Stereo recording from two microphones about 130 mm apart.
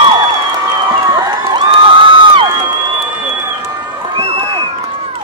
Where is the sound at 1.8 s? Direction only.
40° right (ahead or behind).